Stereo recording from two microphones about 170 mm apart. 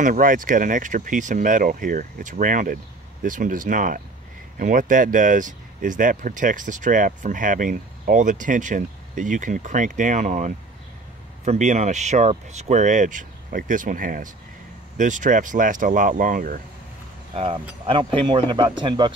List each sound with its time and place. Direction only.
0.0 s speech: 50° right (ahead or behind)
17.8 s speech: 30° right (ahead or behind)